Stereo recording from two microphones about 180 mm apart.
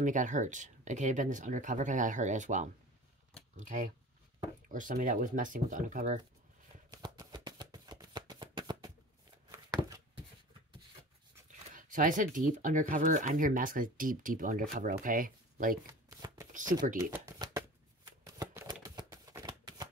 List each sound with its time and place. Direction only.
0.0 s speech: 45° right (ahead or behind)
6.9 s shuffling cards: 20° right (ahead or behind)
9.5 s a sound: 20° right (ahead or behind)
11.7 s speech: 45° right (ahead or behind)
16.1 s shuffling cards: 15° right (ahead or behind)
18.7 s typewriter: 25° right (ahead or behind)